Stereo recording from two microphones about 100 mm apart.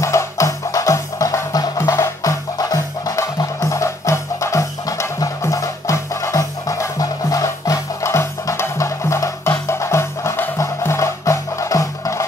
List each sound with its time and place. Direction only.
0.0 s music: 30° left (ahead or behind)